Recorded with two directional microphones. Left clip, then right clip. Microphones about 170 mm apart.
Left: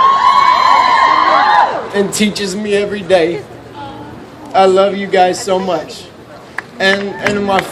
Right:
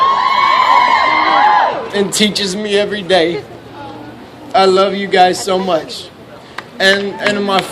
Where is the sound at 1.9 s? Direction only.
50° right (ahead or behind).